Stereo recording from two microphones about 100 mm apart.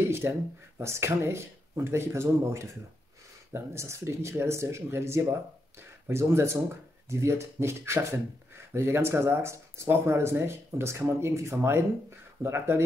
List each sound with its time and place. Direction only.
0.1 s speech: 25° right (ahead or behind)